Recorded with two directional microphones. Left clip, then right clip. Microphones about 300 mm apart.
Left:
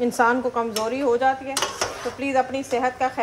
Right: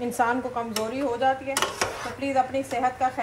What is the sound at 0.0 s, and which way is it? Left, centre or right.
Speech, left.